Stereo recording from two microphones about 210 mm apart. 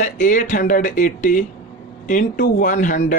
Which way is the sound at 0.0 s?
40° left (ahead or behind).